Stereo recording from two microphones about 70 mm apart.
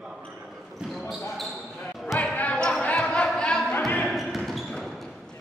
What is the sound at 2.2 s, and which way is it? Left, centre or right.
Basketball bounce, centre.